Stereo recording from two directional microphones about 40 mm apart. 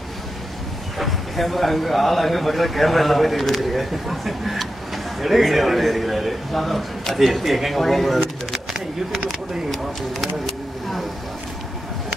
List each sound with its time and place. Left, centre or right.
0.9 s speech: centre
9.7 s speech: centre